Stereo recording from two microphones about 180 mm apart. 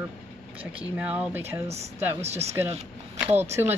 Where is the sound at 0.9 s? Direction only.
5° right (ahead or behind).